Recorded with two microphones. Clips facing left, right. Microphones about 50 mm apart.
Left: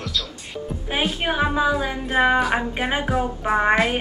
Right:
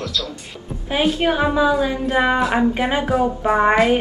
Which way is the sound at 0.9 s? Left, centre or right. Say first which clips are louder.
Right 6 dB; centre.